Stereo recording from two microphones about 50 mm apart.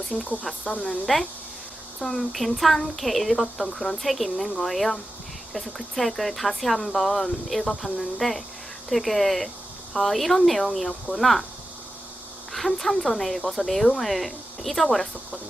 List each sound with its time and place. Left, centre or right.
0.0 s speech: centre
12.5 s speech: centre